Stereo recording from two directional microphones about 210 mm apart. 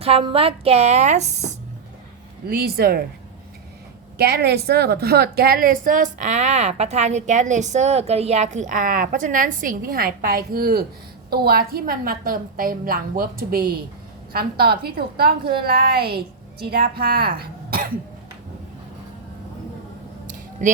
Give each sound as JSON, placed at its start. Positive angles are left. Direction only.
{"t": 0.0, "sound": "a woman's voice", "side_deg": -25}
{"t": 2.5, "sound": "a woman's voice", "side_deg": -45}
{"t": 4.2, "sound": "a woman's voice", "side_deg": -50}
{"t": 20.6, "sound": "a woman's voice", "side_deg": -35}